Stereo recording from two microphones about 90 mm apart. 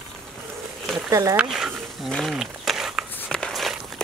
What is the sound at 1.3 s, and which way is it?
Speech, 5° right (ahead or behind).